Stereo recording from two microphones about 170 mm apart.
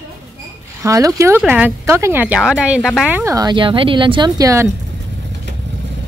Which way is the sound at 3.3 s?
25° right (ahead or behind).